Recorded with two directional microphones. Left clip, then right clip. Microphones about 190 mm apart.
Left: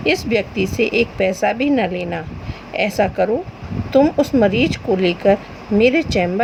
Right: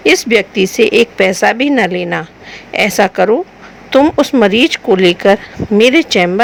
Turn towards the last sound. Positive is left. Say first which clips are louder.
# right 6 dB
turn(degrees=-50)  # may be behind; listen again after turning